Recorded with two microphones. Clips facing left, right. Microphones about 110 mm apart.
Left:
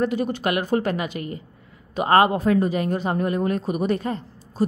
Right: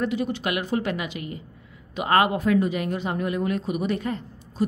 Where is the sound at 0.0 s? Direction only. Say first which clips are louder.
Left 3 dB; 45° left (ahead or behind).